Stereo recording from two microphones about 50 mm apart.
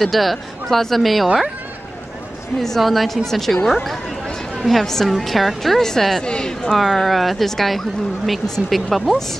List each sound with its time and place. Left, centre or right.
0.0 s a woman's voice: centre
2.6 s a woman's voice: centre
6.2 s speech: centre
6.7 s a woman's voice: centre